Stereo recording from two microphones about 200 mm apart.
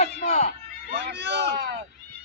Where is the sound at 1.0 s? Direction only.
60° right (ahead or behind).